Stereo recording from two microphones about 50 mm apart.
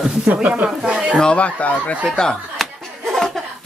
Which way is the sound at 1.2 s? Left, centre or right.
Left.